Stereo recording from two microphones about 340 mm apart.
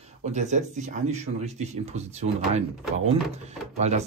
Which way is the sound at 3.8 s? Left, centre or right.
Centre.